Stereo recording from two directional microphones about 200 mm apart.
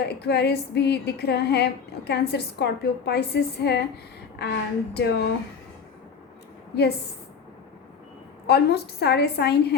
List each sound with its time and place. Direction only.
0.0 s female singing: 55° left (ahead or behind)
8.4 s female singing: 55° left (ahead or behind)